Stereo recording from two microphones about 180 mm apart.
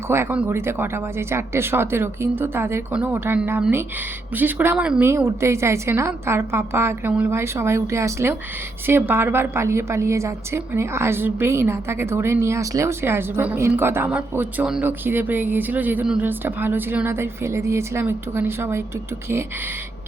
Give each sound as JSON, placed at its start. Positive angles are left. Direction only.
{"t": 0.1, "sound": "a woman's voice", "side_deg": -10}